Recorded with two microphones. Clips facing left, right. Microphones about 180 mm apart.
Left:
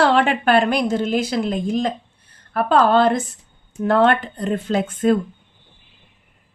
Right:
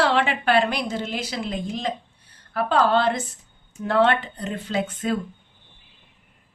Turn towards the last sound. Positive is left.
turn(degrees=50)  # may be behind; listen again after turning